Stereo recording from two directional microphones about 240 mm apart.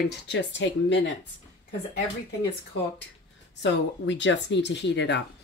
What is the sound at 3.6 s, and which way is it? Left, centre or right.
Speech, left.